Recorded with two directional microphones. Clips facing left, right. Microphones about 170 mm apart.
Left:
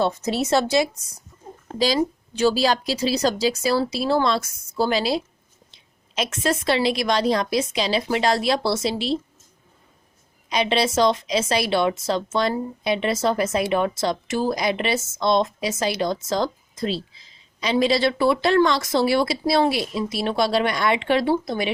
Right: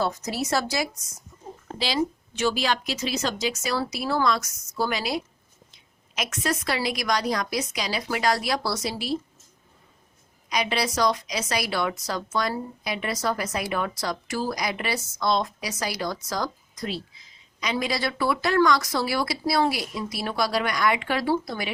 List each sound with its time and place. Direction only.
0.0 s speech: 25° left (ahead or behind)
1.8 s a woman's voice: 35° left (ahead or behind)
10.5 s speech: 25° left (ahead or behind)